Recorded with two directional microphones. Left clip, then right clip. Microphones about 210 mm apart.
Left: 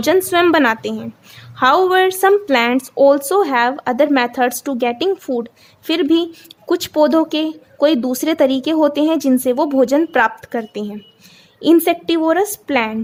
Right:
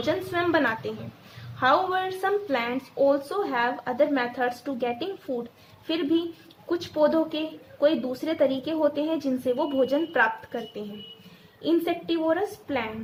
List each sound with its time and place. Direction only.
0.0 s speech: 50° left (ahead or behind)